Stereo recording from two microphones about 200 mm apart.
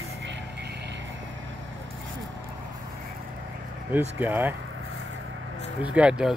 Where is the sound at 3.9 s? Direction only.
10° right (ahead or behind).